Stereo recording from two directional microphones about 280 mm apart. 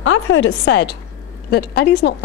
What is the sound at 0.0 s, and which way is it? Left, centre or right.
A woman's voice, left.